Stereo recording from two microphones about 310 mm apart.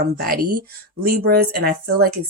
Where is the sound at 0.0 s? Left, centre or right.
Right.